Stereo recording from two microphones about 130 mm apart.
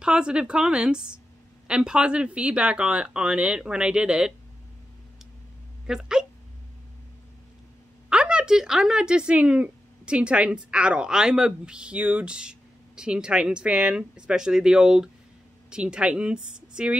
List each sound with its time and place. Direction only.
0.0 s speech: 5° right (ahead or behind)
5.9 s speech: 5° right (ahead or behind)
8.1 s speech: 5° right (ahead or behind)